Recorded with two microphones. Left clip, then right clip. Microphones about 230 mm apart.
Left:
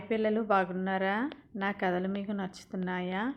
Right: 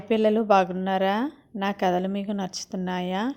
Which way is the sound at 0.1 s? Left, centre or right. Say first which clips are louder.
Right 8 dB; right.